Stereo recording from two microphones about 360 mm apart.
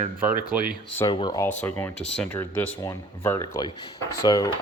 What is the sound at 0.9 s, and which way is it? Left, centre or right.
Speech, centre.